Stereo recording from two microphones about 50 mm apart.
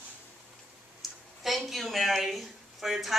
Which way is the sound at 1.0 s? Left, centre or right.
Centre.